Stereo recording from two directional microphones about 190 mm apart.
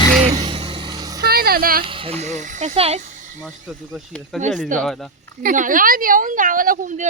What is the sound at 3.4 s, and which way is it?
A woman's voice, centre (ahead or behind).